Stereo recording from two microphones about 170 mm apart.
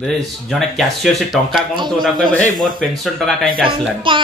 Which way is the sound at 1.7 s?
25° right (ahead or behind).